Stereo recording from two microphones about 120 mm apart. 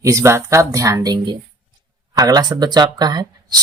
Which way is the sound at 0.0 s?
25° right (ahead or behind).